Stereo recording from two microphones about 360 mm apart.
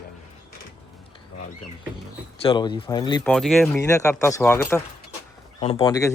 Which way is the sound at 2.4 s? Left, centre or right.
Centre.